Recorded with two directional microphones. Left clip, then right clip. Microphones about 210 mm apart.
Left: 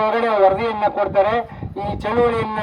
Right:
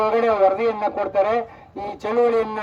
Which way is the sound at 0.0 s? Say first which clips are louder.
Left 2 dB; 55° right (ahead or behind).